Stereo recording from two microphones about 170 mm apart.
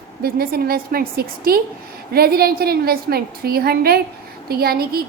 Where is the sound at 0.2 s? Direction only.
60° right (ahead or behind).